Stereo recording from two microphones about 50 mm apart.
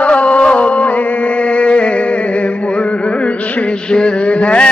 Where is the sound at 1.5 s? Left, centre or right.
Left.